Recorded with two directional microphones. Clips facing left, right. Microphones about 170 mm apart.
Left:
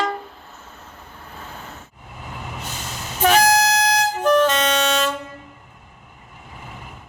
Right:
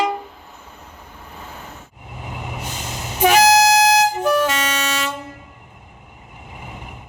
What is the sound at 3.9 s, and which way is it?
Music, 10° right (ahead or behind).